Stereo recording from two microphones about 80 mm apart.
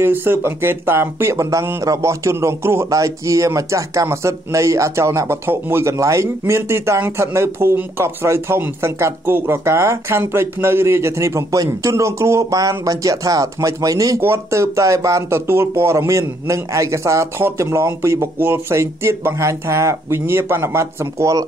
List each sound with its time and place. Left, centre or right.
0.0 s speech: right
14.2 s speech: right